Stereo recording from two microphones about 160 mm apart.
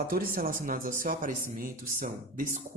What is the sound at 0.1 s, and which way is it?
Speech, 65° right (ahead or behind).